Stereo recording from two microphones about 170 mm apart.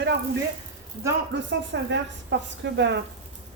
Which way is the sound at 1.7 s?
90° right.